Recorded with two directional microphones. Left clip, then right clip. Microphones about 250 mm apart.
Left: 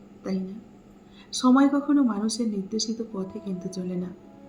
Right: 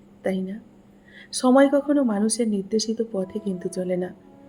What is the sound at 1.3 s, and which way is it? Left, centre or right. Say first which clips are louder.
Speech: right 4 dB; right.